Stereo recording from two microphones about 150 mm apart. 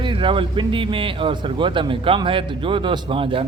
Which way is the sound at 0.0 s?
35° right (ahead or behind).